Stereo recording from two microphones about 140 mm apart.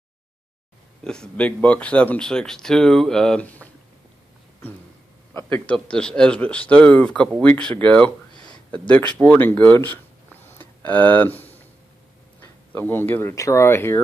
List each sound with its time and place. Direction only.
1.0 s speech: 5° left (ahead or behind)
5.3 s speech: 10° left (ahead or behind)
10.3 s a sound: 15° left (ahead or behind)
12.7 s speech: 15° left (ahead or behind)